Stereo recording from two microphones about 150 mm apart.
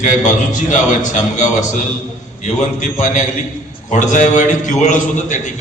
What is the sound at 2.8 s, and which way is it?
A man's voice, 55° left (ahead or behind).